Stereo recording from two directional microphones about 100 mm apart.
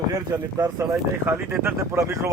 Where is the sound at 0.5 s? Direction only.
30° right (ahead or behind).